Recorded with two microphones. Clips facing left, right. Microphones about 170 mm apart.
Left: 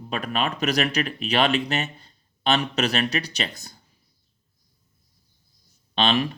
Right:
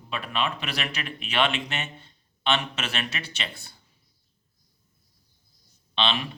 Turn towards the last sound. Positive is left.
turn(degrees=45)  # may be behind; listen again after turning